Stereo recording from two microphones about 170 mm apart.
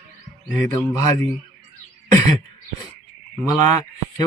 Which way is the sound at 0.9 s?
20° left (ahead or behind).